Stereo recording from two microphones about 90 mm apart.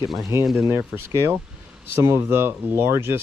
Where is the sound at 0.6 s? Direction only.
30° right (ahead or behind).